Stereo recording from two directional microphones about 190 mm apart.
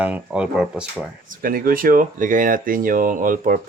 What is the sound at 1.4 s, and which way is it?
Speech, 50° right (ahead or behind).